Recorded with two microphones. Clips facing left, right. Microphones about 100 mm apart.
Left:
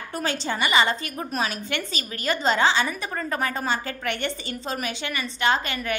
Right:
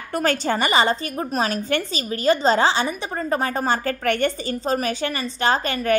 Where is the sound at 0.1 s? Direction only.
50° right (ahead or behind); by 3.6 s 30° right (ahead or behind).